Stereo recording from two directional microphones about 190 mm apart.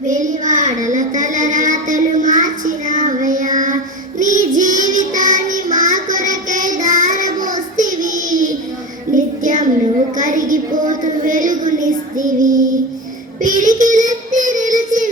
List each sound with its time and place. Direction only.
0.1 s child singing: 40° right (ahead or behind)